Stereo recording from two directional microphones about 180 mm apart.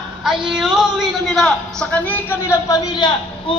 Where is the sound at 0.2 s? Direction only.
5° right (ahead or behind).